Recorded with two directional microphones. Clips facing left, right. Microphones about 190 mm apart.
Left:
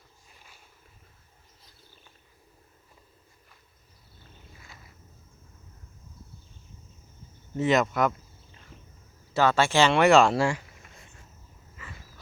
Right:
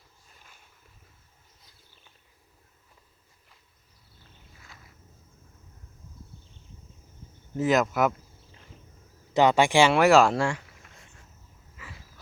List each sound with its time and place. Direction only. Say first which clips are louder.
7.5 s speech: even; centre (ahead or behind)
9.3 s speech: right 3 dB; 15° right (ahead or behind); by 10.6 s 5° left (ahead or behind)
11.8 s a sound: even; 5° right (ahead or behind)